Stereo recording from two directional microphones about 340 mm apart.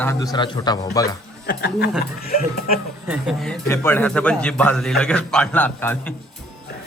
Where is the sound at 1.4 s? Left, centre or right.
Left.